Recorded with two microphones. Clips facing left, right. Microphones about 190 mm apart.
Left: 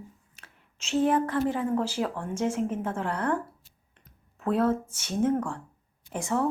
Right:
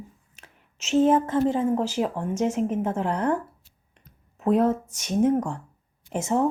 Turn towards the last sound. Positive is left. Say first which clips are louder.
# right 4 dB
turn(degrees=-20)  # may be behind; listen again after turning